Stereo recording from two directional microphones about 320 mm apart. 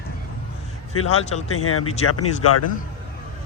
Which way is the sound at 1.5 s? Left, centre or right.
Left.